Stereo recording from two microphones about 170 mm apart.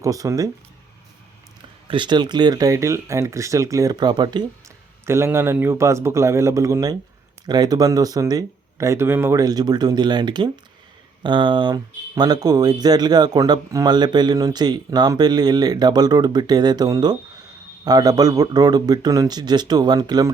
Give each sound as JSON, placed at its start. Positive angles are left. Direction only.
{"t": 0.0, "sound": "speech", "side_deg": -20}
{"t": 1.9, "sound": "speech", "side_deg": -25}
{"t": 5.0, "sound": "a man's voice", "side_deg": -15}